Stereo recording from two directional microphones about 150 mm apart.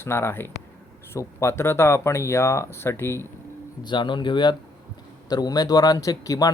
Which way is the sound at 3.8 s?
30° left (ahead or behind).